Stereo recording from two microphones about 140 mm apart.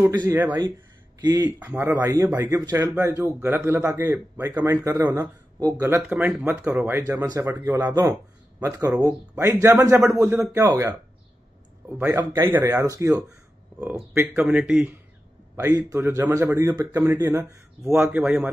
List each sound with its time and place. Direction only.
0.0 s speech: 30° right (ahead or behind)
0.3 s speech: 15° right (ahead or behind)
6.0 s speech: 10° right (ahead or behind)
12.0 s speech: 15° right (ahead or behind)
13.7 s speech: 5° right (ahead or behind)
14.1 s speech: 15° right (ahead or behind)
14.4 s speech: 5° right (ahead or behind)
15.7 s speech: 20° right (ahead or behind)